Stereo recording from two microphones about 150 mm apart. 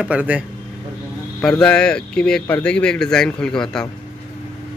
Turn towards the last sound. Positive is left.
turn(degrees=5)  # may be behind; listen again after turning